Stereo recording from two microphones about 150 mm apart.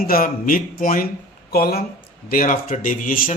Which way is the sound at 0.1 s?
70° left (ahead or behind).